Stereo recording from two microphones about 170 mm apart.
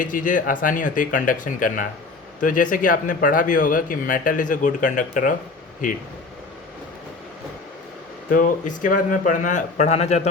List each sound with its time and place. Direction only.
0.0 s speech: 50° left (ahead or behind)
8.3 s speech: 50° left (ahead or behind)